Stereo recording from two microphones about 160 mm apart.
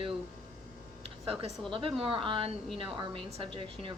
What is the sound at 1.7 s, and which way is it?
A woman's voice, 35° right (ahead or behind).